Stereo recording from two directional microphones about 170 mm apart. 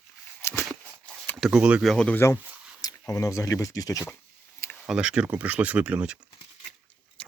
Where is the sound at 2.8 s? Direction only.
20° left (ahead or behind).